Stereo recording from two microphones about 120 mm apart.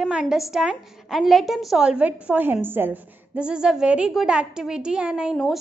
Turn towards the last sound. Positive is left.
turn(degrees=0)  # may be behind; listen again after turning